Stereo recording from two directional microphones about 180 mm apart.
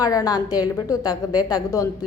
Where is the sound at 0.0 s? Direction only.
20° left (ahead or behind).